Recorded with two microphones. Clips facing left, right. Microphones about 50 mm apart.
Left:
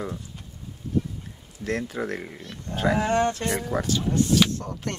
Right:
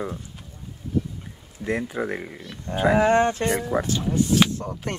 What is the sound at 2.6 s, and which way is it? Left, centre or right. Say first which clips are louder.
Speech: right 5 dB; centre.